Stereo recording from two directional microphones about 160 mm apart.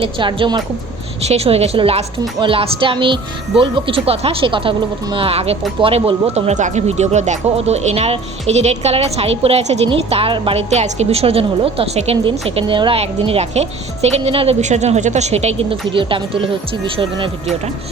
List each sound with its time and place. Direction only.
0.0 s a woman's voice: 30° right (ahead or behind)
1.3 s speech: 40° right (ahead or behind)